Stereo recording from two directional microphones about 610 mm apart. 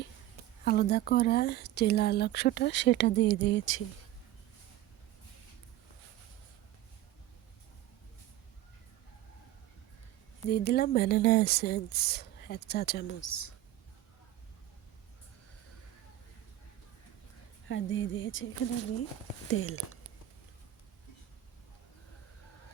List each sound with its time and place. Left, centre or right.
0.6 s speech: centre
10.5 s speech: centre
17.7 s speech: centre
19.5 s speech: left